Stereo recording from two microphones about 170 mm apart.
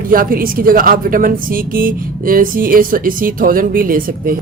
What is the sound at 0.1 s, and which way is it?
Speech, 55° right (ahead or behind).